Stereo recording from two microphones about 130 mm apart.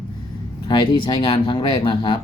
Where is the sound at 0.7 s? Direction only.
35° left (ahead or behind).